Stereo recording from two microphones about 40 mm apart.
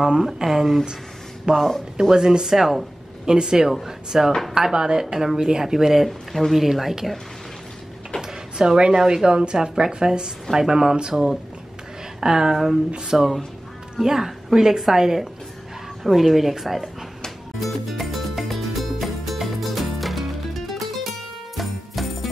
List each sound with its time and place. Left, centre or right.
0.0 s a woman's voice: centre
1.5 s speech: centre
2.1 s a woman's voice: centre
6.0 s speech: centre
8.2 s a woman's voice: centre
17.6 s music: centre